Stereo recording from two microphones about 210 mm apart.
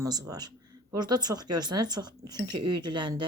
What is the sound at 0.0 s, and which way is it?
Speech, 15° right (ahead or behind).